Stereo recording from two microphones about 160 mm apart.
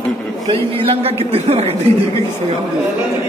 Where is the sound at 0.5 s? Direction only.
35° right (ahead or behind).